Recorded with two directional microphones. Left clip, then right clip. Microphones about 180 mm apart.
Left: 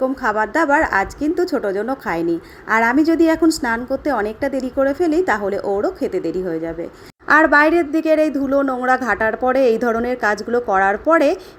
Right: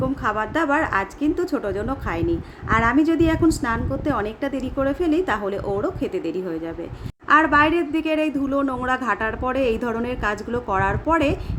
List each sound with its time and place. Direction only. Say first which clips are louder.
0.2 s a woman's voice: left 4 dB; 20° left (ahead or behind)